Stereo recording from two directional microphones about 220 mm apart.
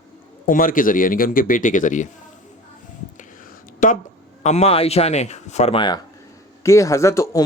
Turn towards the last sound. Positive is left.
turn(degrees=15)  # may be behind; listen again after turning